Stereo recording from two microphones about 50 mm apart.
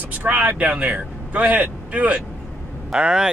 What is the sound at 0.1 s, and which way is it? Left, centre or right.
A man's voice, right.